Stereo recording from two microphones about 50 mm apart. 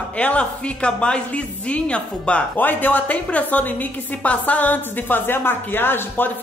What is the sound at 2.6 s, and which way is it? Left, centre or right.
Speech, left.